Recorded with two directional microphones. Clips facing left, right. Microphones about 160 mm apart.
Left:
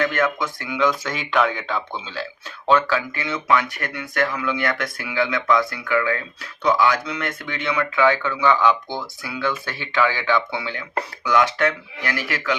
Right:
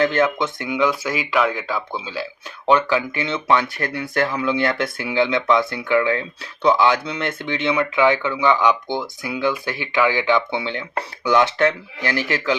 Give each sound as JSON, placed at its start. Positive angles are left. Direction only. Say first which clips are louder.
{"t": 0.0, "sound": "speech", "louder": "right 3 dB", "side_deg": -30}